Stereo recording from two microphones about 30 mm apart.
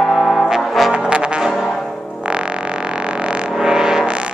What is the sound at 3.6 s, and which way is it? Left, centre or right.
Music, right.